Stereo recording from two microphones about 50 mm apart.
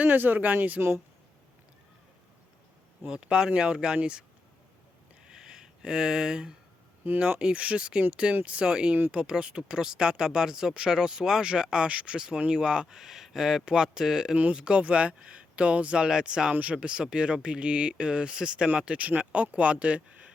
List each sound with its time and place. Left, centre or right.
0.0 s speech: right
0.8 s speech: right
3.2 s speech: centre
5.3 s a sound: centre
7.2 s speech: right
14.3 s speech: right